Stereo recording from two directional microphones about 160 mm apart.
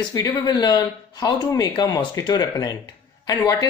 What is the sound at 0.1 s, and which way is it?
Speech, 25° left (ahead or behind).